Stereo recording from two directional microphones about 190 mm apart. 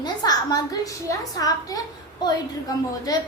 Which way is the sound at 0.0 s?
20° left (ahead or behind).